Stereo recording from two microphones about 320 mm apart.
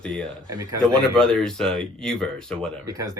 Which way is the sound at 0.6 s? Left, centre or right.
Centre.